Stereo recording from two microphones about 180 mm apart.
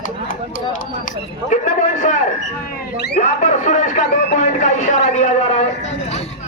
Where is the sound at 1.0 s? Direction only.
45° left (ahead or behind).